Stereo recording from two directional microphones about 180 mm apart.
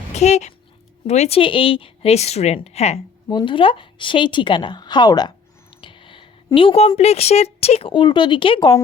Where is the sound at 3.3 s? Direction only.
25° left (ahead or behind).